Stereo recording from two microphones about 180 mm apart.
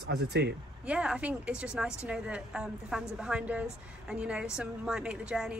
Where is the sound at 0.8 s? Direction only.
5° right (ahead or behind).